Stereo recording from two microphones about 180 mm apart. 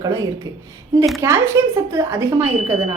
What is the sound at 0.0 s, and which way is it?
A woman's voice, 20° right (ahead or behind).